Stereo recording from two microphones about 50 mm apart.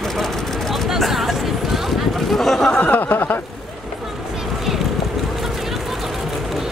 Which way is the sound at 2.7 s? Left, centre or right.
Left.